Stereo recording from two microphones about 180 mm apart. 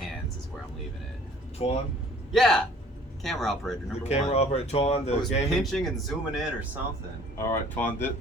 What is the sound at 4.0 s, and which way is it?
Speech, 35° left (ahead or behind).